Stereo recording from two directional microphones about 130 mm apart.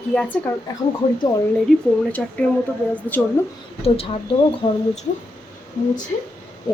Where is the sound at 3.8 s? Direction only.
50° left (ahead or behind).